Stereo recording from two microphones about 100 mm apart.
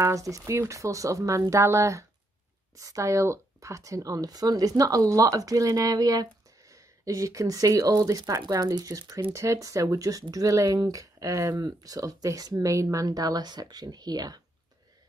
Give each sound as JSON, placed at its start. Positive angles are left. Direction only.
{"t": 0.0, "sound": "speech", "side_deg": -35}